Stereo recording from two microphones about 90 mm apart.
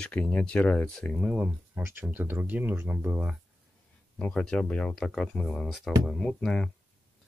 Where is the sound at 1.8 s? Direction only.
25° right (ahead or behind).